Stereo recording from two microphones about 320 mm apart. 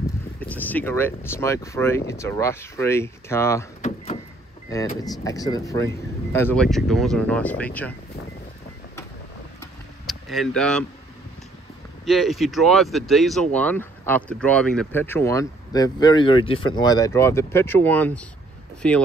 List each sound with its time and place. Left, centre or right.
0.4 s speech: centre
3.8 s door: left
5.0 s speech: centre
10.0 s speech: centre
12.1 s speech: centre